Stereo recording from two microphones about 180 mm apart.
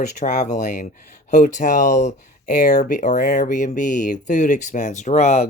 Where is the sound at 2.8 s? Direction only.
45° left (ahead or behind).